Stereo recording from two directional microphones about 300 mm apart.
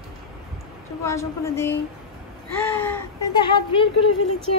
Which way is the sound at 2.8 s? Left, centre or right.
Centre.